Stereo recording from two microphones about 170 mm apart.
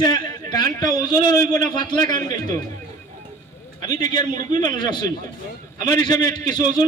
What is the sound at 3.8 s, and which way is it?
A man's voice, 25° left (ahead or behind).